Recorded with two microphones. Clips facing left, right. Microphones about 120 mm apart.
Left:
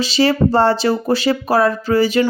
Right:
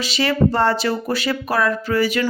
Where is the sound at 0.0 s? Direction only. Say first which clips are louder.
Left 4 dB; 30° left (ahead or behind).